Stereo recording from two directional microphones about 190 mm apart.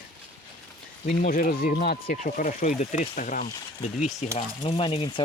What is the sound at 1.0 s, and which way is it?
Speech, 45° left (ahead or behind).